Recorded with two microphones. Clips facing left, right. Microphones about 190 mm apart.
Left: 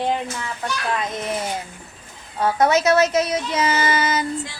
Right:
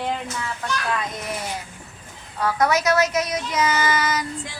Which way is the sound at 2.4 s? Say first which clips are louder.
Left 3 dB; 25° left (ahead or behind).